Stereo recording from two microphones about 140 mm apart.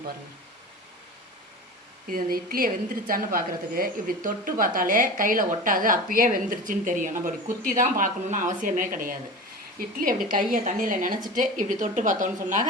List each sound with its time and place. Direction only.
2.0 s a woman's voice: 90° right
9.7 s a woman's voice: 90° right
10.3 s speech: 70° right (ahead or behind)